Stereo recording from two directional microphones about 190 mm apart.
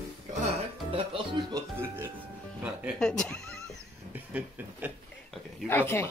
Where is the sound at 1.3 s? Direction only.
25° right (ahead or behind).